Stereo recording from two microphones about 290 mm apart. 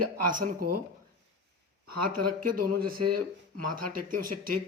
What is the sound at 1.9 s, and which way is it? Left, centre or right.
Speech, right.